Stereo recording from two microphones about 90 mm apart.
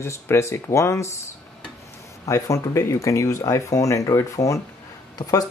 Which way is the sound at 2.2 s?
35° left (ahead or behind).